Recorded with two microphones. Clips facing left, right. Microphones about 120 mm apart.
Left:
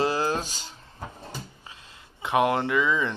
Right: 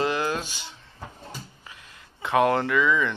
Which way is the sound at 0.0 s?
30° left (ahead or behind).